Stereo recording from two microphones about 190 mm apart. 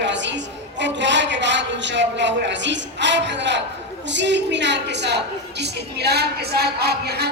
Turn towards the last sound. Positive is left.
turn(degrees=-55)  # may be behind; listen again after turning